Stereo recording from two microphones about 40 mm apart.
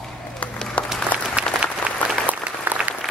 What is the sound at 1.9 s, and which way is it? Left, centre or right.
Applause, right.